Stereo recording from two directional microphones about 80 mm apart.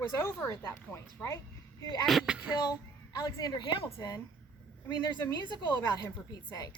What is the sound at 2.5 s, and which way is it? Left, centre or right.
A woman's voice, left.